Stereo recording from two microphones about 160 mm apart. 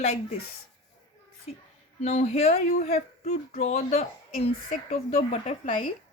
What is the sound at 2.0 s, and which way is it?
Speech, 40° left (ahead or behind).